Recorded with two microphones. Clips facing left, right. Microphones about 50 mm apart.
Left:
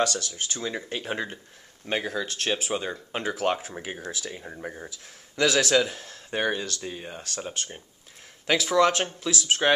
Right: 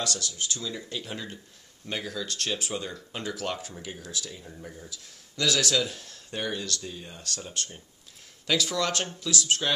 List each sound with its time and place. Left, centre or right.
0.0 s speech: left
9.6 s speech: left